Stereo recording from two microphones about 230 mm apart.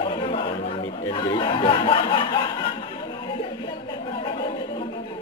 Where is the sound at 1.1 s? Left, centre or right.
Centre.